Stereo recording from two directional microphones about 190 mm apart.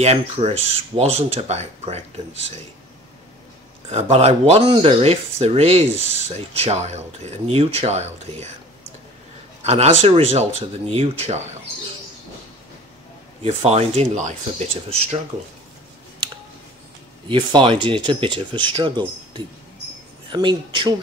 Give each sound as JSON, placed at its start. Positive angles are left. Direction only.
{"t": 0.0, "sound": "speech", "side_deg": -35}
{"t": 3.9, "sound": "speech", "side_deg": -35}
{"t": 9.6, "sound": "speech", "side_deg": -35}
{"t": 13.4, "sound": "speech", "side_deg": -30}
{"t": 17.3, "sound": "speech", "side_deg": -25}